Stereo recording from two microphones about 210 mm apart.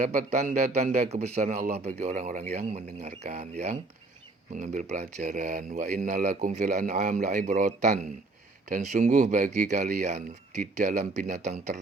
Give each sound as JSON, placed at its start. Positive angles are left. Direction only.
{"t": 0.0, "sound": "speech", "side_deg": -35}
{"t": 8.7, "sound": "speech", "side_deg": -35}